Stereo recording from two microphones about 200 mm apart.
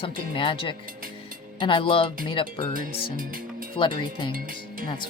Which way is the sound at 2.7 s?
45° right (ahead or behind).